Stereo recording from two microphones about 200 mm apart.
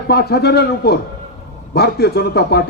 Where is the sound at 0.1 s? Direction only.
55° left (ahead or behind).